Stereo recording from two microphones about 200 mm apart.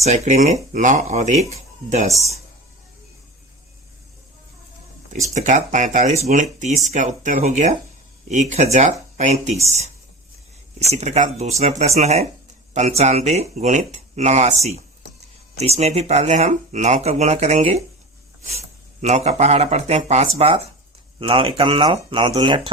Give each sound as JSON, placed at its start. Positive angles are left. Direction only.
{"t": 0.0, "sound": "speech", "side_deg": -35}
{"t": 5.3, "sound": "speech", "side_deg": -40}
{"t": 19.0, "sound": "speech", "side_deg": -35}